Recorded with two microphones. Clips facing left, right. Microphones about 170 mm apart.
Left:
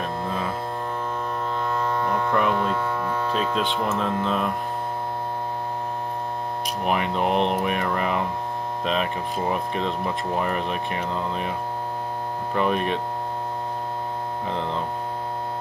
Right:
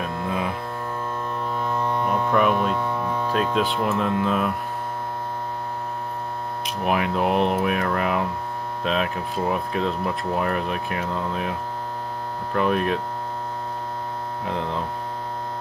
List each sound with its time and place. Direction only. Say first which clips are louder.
0.0 s mains hum: right 1 dB; 15° right (ahead or behind)
1.8 s hum: right 2 dB; 15° right (ahead or behind)
2.6 s hum: right 1 dB; centre (ahead or behind)
3.1 s hum: even; 10° right (ahead or behind)
3.3 s speech: right 4 dB; centre (ahead or behind)
6.8 s speech: right 2 dB; centre (ahead or behind)
12.5 s speech: right 2 dB; centre (ahead or behind)
14.5 s speech: right 1 dB; centre (ahead or behind)